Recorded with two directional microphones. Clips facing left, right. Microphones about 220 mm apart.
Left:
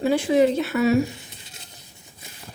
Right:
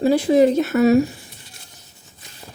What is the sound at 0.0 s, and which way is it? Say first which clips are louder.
Speech: right 4 dB; 40° right (ahead or behind).